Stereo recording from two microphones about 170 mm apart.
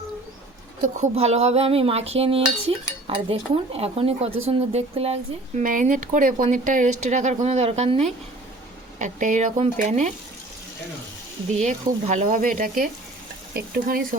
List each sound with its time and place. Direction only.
0.8 s cutlery: 40° right (ahead or behind)
4.4 s speech: 35° right (ahead or behind)
11.5 s speech: 45° right (ahead or behind)